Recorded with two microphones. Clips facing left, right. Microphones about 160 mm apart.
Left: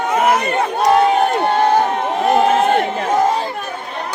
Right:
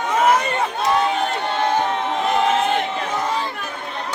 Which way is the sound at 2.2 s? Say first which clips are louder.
Left 6 dB; 45° left (ahead or behind).